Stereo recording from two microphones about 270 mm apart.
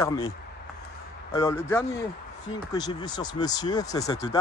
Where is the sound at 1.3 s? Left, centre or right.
Centre.